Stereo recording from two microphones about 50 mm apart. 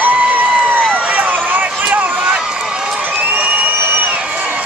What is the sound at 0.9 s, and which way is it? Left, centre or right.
Run, right.